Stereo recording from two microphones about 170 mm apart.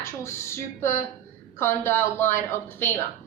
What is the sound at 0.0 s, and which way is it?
A woman's voice, 15° left (ahead or behind).